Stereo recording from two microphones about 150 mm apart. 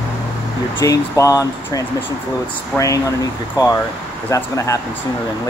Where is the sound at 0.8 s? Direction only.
20° left (ahead or behind).